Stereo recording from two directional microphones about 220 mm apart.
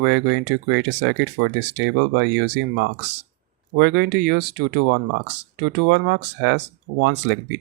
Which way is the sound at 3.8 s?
50° right (ahead or behind).